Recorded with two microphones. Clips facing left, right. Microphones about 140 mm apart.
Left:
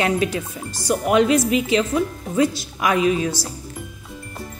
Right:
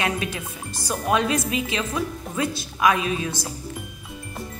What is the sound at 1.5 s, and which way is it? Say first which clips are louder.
Speech: left 7 dB; 25° left (ahead or behind).